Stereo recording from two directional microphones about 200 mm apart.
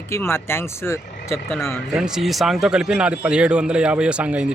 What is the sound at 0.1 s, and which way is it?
Speech, 10° left (ahead or behind).